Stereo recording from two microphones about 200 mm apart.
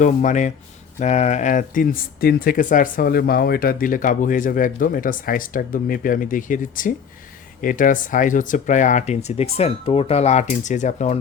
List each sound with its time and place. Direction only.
0.0 s speech: 40° left (ahead or behind)